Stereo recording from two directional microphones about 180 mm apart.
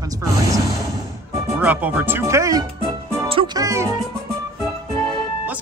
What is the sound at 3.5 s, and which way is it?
Music, 15° right (ahead or behind).